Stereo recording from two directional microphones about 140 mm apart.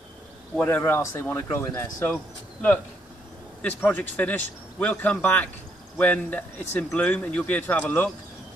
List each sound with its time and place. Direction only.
0.6 s speech: 15° left (ahead or behind)
3.6 s speech: 10° left (ahead or behind)